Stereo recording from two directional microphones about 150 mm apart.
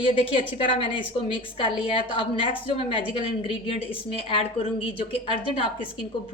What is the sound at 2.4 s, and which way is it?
A woman's voice, 40° left (ahead or behind).